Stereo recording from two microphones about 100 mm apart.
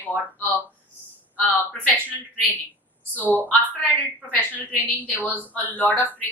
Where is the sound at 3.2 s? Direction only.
15° right (ahead or behind).